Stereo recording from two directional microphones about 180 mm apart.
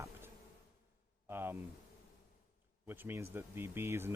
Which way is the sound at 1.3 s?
10° right (ahead or behind).